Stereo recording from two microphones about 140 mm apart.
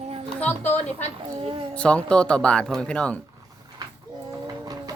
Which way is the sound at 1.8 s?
5° left (ahead or behind).